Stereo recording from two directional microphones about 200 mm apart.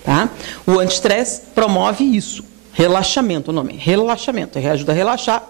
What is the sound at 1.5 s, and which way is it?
Speech, 25° right (ahead or behind).